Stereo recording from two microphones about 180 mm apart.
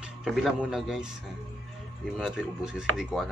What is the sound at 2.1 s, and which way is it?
Speech, 5° right (ahead or behind).